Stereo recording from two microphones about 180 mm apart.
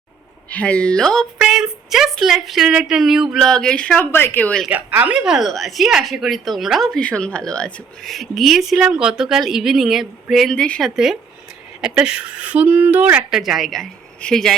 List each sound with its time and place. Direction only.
0.5 s speech: 5° left (ahead or behind)
4.7 s speech: 10° right (ahead or behind)